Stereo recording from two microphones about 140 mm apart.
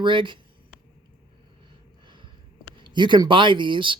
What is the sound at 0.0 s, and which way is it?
Speech, 35° right (ahead or behind).